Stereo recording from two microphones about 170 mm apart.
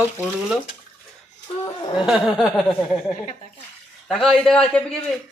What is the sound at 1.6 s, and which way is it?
Speech, 25° left (ahead or behind).